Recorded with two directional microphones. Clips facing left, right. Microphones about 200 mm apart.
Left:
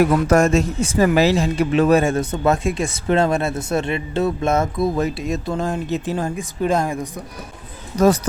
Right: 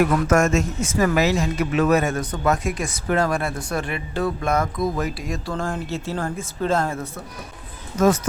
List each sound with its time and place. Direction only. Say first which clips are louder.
0.1 s speech: left 3 dB; 35° left (ahead or behind); by 7.1 s 15° left (ahead or behind)
7.9 s speech: left 3 dB; 35° left (ahead or behind)